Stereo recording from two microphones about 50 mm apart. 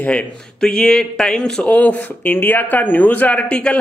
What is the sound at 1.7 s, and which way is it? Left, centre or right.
Speech, left.